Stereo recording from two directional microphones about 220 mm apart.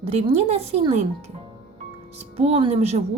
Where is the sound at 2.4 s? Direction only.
25° right (ahead or behind).